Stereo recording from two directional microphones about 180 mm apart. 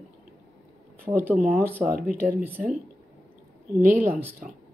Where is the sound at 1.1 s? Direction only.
25° right (ahead or behind).